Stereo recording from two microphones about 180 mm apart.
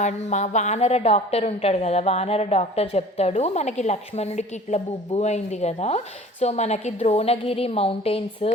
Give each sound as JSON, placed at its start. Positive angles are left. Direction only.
{"t": 0.0, "sound": "a woman's voice", "side_deg": 40}